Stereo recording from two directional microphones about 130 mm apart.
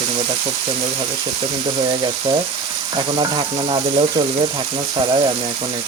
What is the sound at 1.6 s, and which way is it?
Speech, 40° right (ahead or behind).